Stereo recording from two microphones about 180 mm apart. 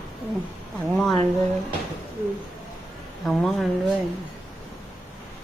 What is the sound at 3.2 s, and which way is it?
Speech, centre (ahead or behind).